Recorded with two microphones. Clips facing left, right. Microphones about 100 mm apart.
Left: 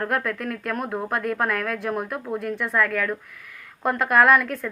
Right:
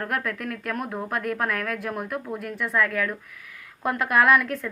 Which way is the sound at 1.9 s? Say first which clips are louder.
Left 2 dB; 30° left (ahead or behind).